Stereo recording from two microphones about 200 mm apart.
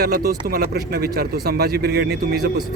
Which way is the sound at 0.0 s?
50° right (ahead or behind).